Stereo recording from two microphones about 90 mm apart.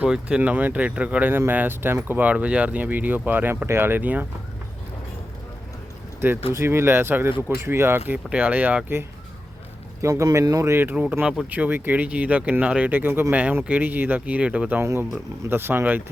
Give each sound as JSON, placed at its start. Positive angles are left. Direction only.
{"t": 0.0, "sound": "speech", "side_deg": -15}
{"t": 6.1, "sound": "speech", "side_deg": -25}
{"t": 10.0, "sound": "speech", "side_deg": -35}
{"t": 10.9, "sound": "speech", "side_deg": -15}
{"t": 14.8, "sound": "speech", "side_deg": -30}